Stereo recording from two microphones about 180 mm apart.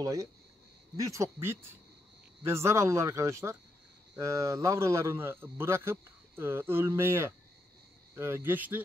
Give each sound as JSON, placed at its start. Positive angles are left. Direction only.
{"t": 0.0, "sound": "a man's voice", "side_deg": -20}